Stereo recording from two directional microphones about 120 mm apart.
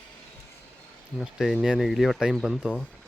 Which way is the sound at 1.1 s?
5° right (ahead or behind).